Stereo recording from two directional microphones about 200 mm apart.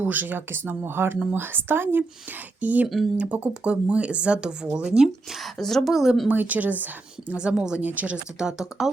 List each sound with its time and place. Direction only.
0.0 s speech: 10° right (ahead or behind)